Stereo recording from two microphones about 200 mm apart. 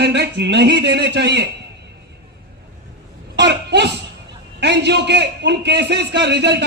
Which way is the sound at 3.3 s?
60° right (ahead or behind).